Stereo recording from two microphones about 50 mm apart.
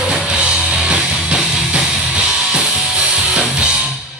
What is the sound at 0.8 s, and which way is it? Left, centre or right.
Music, centre.